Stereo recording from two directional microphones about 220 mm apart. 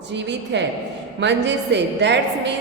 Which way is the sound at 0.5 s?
50° right (ahead or behind).